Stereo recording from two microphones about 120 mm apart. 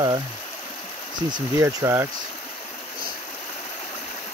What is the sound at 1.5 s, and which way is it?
Speech, 25° right (ahead or behind).